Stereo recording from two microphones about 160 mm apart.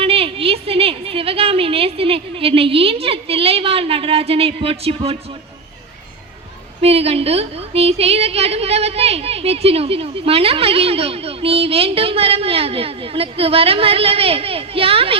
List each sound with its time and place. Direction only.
0.0 s a woman's voice: 35° right (ahead or behind)
6.8 s a woman's voice: 40° right (ahead or behind)